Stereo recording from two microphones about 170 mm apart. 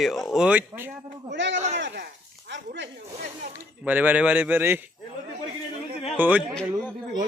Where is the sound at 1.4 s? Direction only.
90° right.